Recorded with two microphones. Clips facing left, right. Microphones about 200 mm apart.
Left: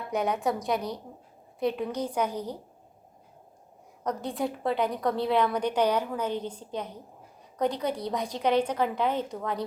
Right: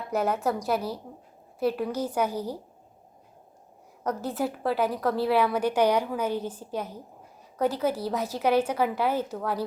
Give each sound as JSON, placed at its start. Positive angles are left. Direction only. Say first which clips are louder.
{"t": 0.1, "sound": "a woman's voice", "louder": "right 1 dB", "side_deg": -5}
{"t": 4.0, "sound": "a woman's voice", "louder": "right 1 dB", "side_deg": -5}